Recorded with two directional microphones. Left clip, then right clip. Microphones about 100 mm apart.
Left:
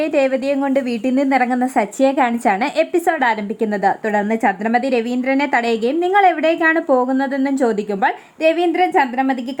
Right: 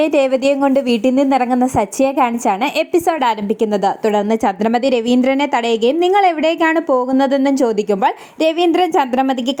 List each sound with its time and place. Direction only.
0.0 s a woman's voice: 30° right (ahead or behind)
1.1 s a woman's voice: 20° right (ahead or behind)
1.4 s a woman's voice: 35° right (ahead or behind)
5.5 s a woman's voice: 30° right (ahead or behind)
8.7 s speech: 55° right (ahead or behind)